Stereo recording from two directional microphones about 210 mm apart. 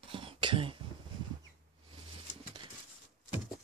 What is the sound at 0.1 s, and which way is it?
Cough, 25° right (ahead or behind).